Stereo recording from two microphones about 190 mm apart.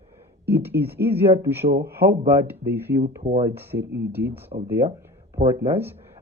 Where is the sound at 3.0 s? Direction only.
30° right (ahead or behind).